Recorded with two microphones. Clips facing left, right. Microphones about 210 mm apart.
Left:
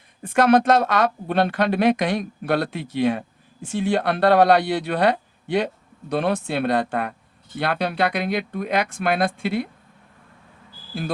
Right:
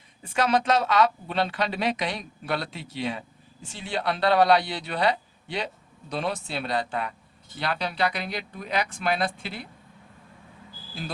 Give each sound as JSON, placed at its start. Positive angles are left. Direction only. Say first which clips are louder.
{"t": 0.2, "sound": "speech", "louder": "left 8 dB", "side_deg": 55}